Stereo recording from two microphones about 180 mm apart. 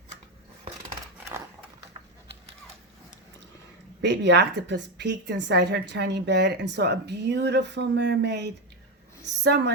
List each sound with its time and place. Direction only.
4.0 s a woman's voice: 75° right (ahead or behind)